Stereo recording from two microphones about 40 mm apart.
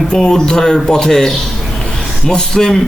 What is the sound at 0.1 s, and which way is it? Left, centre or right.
A man's voice, centre.